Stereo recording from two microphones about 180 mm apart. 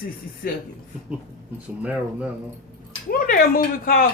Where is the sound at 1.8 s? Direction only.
5° right (ahead or behind).